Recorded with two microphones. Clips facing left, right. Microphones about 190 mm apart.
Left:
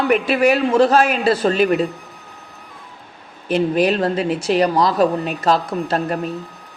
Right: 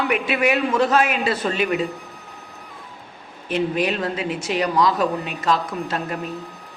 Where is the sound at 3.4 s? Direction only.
35° left (ahead or behind).